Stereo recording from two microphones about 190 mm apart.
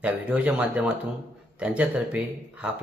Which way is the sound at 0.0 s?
5° right (ahead or behind).